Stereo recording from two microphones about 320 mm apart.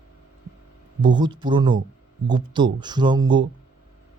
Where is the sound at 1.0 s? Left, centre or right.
Centre.